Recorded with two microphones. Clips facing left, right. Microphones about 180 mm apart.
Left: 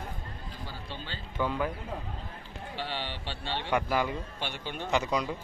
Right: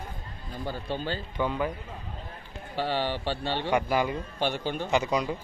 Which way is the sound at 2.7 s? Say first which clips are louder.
Right 9 dB; 45° right (ahead or behind).